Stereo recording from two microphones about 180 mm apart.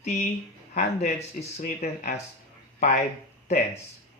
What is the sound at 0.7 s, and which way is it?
Speech, 40° left (ahead or behind).